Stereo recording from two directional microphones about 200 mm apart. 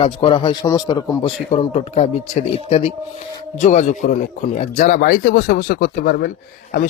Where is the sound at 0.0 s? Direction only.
25° left (ahead or behind).